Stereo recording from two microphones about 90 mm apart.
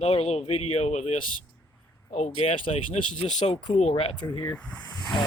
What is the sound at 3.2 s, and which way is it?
Speech, 90° left.